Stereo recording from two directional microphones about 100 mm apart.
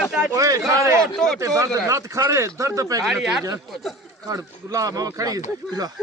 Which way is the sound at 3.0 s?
Centre (ahead or behind).